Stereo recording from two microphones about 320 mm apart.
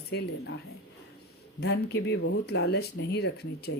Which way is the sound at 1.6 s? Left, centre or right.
Left.